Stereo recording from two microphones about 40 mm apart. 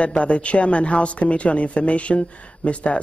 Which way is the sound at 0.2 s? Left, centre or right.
Left.